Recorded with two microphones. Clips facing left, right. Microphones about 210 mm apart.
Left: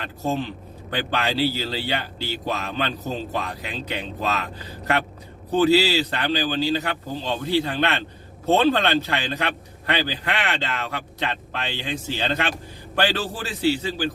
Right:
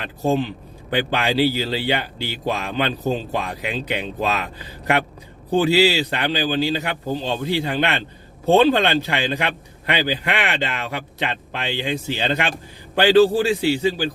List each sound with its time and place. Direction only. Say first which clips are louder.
0.3 s a man's voice: right 5 dB; 15° right (ahead or behind)
5.5 s a man's voice: right 1 dB; 10° right (ahead or behind)